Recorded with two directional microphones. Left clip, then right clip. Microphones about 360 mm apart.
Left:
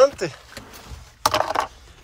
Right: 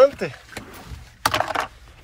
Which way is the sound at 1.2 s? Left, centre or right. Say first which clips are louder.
Left 1 dB; centre.